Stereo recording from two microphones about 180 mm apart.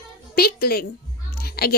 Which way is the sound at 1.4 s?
60° left (ahead or behind).